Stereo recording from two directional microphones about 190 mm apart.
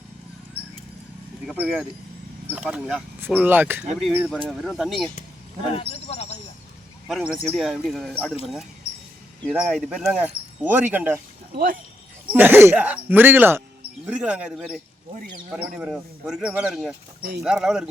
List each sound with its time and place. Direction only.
1.5 s speech: 5° right (ahead or behind)
5.7 s a man's voice: 30° left (ahead or behind)
7.1 s speech: 5° right (ahead or behind)
9.5 s speech: 5° right (ahead or behind)
11.5 s speech: 45° right (ahead or behind)
12.2 s speech: 10° right (ahead or behind)